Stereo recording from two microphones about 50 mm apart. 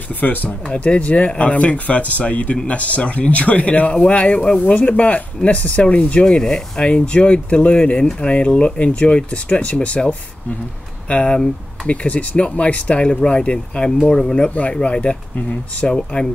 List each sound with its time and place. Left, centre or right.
0.1 s speech: left